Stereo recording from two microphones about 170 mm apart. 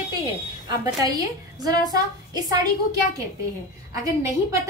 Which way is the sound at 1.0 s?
20° right (ahead or behind).